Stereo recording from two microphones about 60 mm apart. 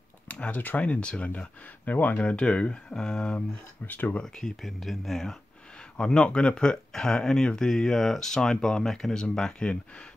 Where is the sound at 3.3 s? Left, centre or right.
Left.